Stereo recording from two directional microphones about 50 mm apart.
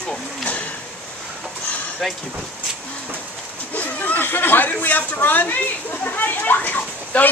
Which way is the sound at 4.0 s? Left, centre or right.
Left.